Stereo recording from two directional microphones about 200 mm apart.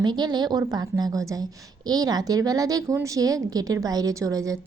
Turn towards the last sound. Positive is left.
turn(degrees=-15)  # may be behind; listen again after turning